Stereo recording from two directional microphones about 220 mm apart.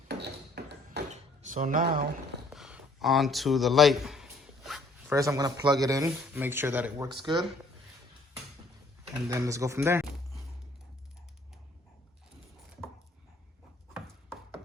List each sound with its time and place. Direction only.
0.1 s mechanisms: 50° right (ahead or behind)
1.1 s a sound: 35° right (ahead or behind)
2.5 s a sound: 5° right (ahead or behind)
5.1 s speech: 15° right (ahead or behind)
7.1 s speech: 20° right (ahead or behind)
9.3 s speech: 15° right (ahead or behind)